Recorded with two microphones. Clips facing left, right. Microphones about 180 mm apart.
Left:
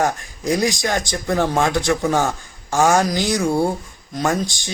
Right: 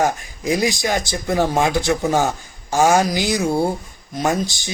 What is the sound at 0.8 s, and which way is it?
Speech, 15° right (ahead or behind).